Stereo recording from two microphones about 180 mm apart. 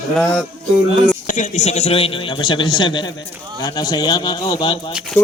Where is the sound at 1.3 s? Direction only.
45° left (ahead or behind); by 4.8 s 25° left (ahead or behind).